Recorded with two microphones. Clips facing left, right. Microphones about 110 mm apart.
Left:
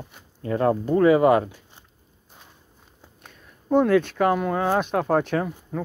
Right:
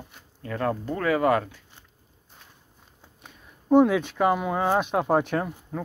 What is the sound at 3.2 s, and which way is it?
Speech, 5° right (ahead or behind).